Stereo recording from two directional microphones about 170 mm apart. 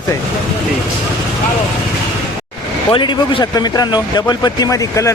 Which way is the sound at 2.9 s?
30° left (ahead or behind).